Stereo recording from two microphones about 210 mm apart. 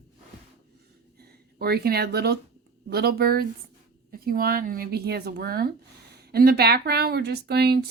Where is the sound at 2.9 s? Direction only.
50° right (ahead or behind).